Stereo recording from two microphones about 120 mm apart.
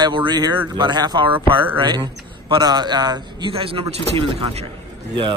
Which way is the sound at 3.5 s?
50° right (ahead or behind).